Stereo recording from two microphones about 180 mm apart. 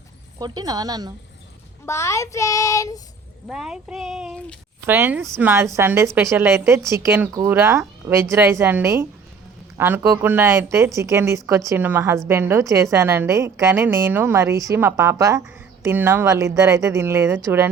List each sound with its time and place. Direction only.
0.3 s speech: 20° right (ahead or behind)
1.9 s speech: 15° left (ahead or behind)
3.5 s speech: 5° right (ahead or behind)
4.9 s a woman's voice: 10° right (ahead or behind)